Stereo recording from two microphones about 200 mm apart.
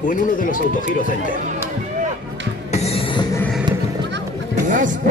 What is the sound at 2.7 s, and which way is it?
Music, 30° left (ahead or behind).